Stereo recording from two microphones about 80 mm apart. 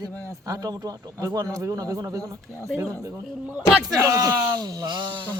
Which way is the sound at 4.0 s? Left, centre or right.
Right.